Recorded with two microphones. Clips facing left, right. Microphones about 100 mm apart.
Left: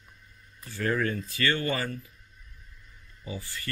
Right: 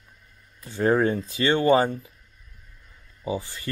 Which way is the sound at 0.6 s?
20° right (ahead or behind).